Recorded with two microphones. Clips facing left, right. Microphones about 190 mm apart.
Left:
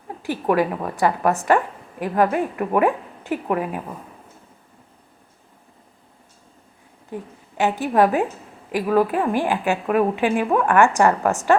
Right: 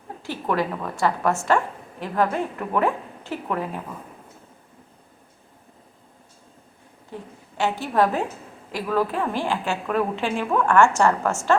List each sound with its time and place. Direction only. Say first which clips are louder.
0.3 s a woman's voice: left 5 dB; 10° left (ahead or behind)
7.1 s a woman's voice: left 5 dB; 15° left (ahead or behind)